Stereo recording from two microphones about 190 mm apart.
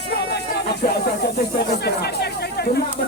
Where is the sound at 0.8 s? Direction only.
45° left (ahead or behind).